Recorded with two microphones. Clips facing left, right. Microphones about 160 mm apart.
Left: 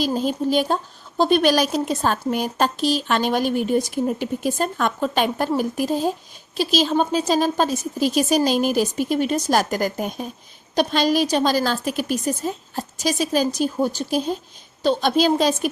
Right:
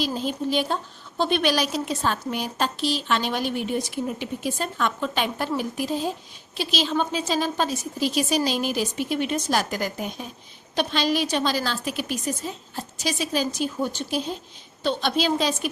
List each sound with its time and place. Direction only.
0.0 s speech: 45° left (ahead or behind)